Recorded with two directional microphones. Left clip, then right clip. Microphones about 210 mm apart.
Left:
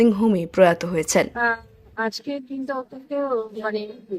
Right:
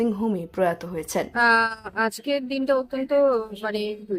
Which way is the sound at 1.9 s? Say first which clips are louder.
Left 2 dB; 25° right (ahead or behind).